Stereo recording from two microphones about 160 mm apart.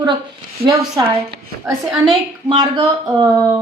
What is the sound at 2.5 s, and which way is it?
Speech, 30° right (ahead or behind).